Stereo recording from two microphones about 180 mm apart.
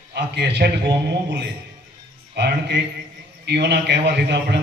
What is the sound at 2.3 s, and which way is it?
A man's voice, 70° right (ahead or behind).